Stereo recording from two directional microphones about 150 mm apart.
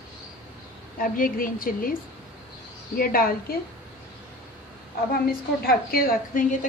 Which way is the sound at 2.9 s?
75° left (ahead or behind).